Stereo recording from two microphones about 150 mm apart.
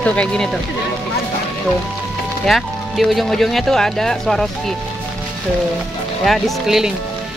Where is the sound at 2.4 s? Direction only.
Centre (ahead or behind).